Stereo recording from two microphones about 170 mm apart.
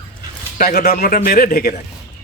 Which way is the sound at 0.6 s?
65° left (ahead or behind).